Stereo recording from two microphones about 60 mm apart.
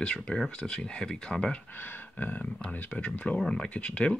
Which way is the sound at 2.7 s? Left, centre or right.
Left.